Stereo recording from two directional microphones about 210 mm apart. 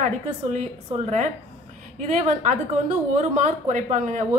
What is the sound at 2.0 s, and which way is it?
A woman's voice, 35° right (ahead or behind).